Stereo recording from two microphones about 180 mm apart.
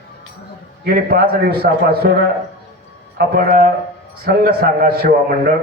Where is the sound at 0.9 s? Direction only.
60° right (ahead or behind).